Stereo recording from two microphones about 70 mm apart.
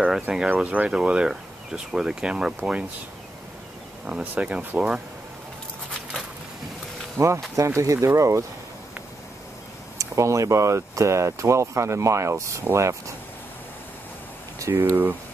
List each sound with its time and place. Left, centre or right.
0.3 s speech: centre
4.0 s speech: centre
7.2 s speech: right
9.9 s speech: right
14.6 s speech: right